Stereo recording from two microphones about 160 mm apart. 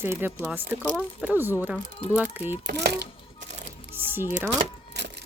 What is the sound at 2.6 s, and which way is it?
Speech, 90° right.